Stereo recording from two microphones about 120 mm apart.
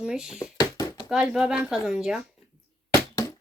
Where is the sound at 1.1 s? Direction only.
5° right (ahead or behind).